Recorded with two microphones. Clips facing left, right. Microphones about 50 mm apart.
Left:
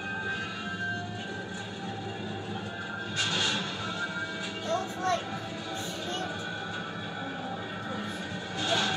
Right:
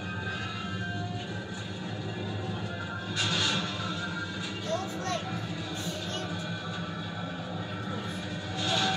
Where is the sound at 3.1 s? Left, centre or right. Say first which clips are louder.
Even; centre.